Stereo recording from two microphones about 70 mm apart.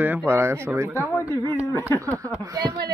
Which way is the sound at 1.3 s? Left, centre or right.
Left.